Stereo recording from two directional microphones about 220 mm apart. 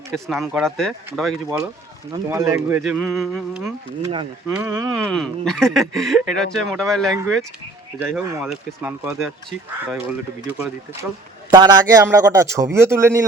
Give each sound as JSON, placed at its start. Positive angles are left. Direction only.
{"t": 0.1, "sound": "speech", "side_deg": 0}
{"t": 1.5, "sound": "a man's voice", "side_deg": -10}
{"t": 4.0, "sound": "a man's voice", "side_deg": -20}
{"t": 5.0, "sound": "a man's voice", "side_deg": 5}
{"t": 11.5, "sound": "a man's voice", "side_deg": -15}